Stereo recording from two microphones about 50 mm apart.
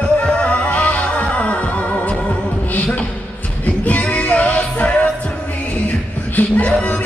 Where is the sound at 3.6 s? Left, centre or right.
Left.